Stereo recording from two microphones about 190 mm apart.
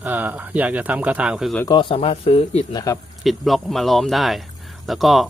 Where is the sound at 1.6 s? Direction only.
25° left (ahead or behind).